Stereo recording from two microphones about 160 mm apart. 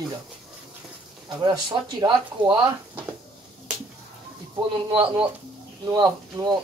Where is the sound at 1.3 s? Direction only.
30° right (ahead or behind).